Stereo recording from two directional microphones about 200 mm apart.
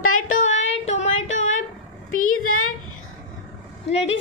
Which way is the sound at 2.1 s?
90° left.